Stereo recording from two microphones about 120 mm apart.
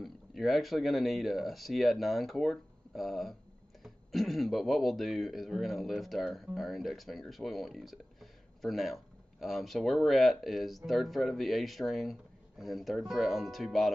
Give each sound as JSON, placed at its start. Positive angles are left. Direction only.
{"t": 0.0, "sound": "speech", "side_deg": 0}